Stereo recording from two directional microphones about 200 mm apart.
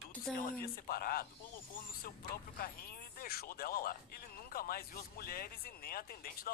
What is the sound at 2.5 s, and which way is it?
Speech, 50° left (ahead or behind).